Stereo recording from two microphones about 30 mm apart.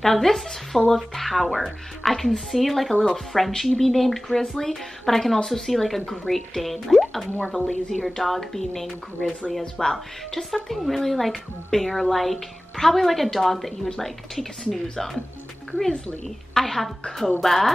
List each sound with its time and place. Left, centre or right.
0.0 s speech: centre
2.9 s speech: centre
3.3 s speech: centre
16.5 s speech: centre